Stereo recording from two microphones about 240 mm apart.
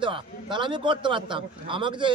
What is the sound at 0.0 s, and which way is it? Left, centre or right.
Speech, centre.